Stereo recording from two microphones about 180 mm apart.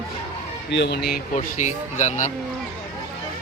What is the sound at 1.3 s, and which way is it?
Speech, 40° left (ahead or behind).